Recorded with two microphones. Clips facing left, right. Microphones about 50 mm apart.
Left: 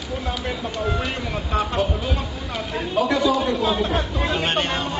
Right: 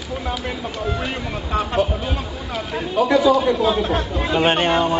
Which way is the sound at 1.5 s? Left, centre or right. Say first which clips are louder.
Right 3 dB; centre.